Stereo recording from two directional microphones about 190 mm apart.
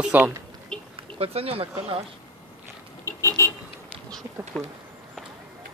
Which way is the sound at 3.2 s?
15° left (ahead or behind).